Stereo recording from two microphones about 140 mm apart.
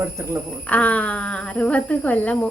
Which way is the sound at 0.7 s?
10° left (ahead or behind).